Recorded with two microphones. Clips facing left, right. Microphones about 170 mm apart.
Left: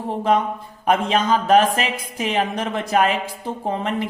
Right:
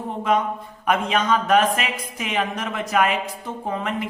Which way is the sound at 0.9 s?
30° left (ahead or behind).